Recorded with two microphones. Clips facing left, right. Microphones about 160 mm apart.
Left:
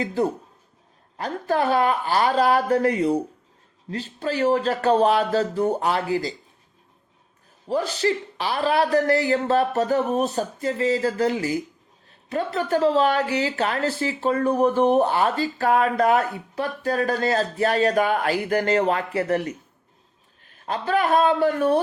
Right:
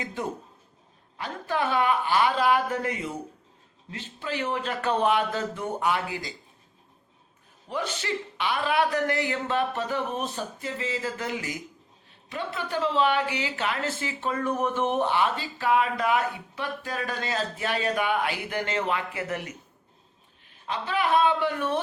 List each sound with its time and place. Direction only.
0.0 s speech: 35° left (ahead or behind)
7.7 s speech: 35° left (ahead or behind)
20.7 s speech: 45° left (ahead or behind)